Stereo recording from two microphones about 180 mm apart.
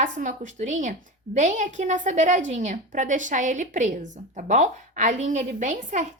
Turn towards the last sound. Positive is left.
turn(degrees=-45)  # may be behind; listen again after turning